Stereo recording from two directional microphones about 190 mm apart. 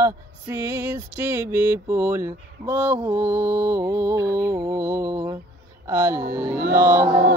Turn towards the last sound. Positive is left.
turn(degrees=-15)  # may be behind; listen again after turning